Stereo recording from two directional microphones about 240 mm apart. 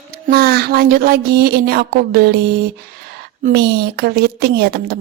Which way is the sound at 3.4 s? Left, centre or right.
Right.